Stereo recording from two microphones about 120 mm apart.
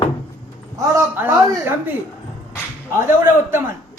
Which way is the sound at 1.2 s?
20° right (ahead or behind).